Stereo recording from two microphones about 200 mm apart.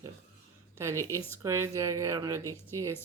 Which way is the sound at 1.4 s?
15° right (ahead or behind).